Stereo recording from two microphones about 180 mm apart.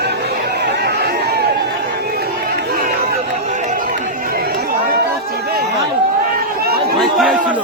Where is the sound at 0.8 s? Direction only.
65° right (ahead or behind).